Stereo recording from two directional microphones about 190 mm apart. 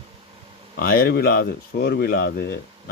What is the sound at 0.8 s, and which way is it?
Speech, 50° left (ahead or behind).